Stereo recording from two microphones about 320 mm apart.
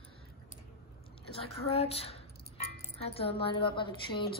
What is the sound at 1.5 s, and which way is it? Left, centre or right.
Speech, centre.